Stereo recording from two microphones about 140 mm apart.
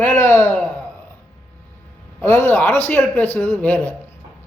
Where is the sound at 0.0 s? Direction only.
20° left (ahead or behind).